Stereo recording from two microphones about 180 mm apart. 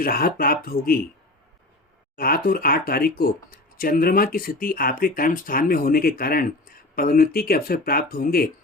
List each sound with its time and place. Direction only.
0.0 s speech: 55° left (ahead or behind)
2.1 s speech: 55° left (ahead or behind)